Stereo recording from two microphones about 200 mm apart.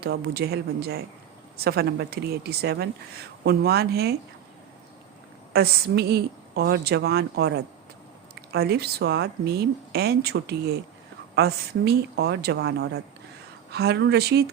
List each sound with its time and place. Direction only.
0.0 s speech: 50° right (ahead or behind)
5.5 s speech: 55° right (ahead or behind)